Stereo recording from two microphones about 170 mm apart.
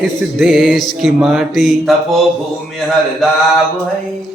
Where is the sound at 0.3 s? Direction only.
Centre (ahead or behind).